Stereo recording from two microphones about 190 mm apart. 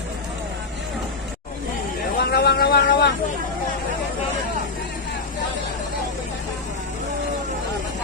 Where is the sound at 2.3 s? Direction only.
55° left (ahead or behind).